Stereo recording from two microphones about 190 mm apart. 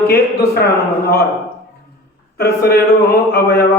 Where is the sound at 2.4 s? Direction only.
55° left (ahead or behind).